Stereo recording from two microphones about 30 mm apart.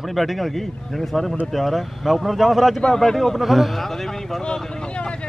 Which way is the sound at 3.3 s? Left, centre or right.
Centre.